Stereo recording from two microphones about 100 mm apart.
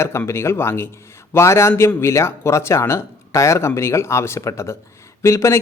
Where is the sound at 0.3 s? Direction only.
25° left (ahead or behind).